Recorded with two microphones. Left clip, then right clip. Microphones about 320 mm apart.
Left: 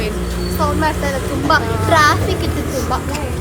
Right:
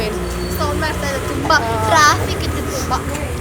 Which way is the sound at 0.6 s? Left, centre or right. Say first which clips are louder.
Left 4 dB; left.